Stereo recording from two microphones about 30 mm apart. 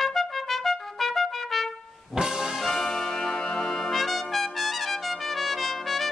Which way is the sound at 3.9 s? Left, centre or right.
Centre.